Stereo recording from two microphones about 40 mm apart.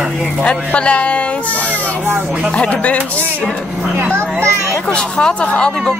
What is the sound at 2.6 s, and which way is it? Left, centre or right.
Speech, left.